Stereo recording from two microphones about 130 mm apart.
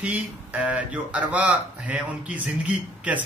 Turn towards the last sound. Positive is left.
turn(degrees=-10)  # may be behind; listen again after turning